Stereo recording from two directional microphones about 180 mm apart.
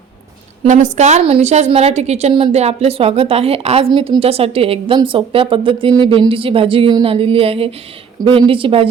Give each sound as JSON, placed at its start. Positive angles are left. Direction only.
{"t": 0.6, "sound": "a woman's voice", "side_deg": -40}